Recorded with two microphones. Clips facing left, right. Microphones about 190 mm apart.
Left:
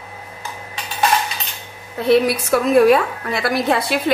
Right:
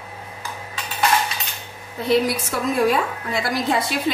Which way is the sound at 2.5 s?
65° left (ahead or behind).